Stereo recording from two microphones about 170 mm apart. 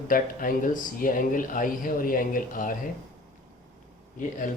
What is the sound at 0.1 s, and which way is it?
Speech, 55° left (ahead or behind).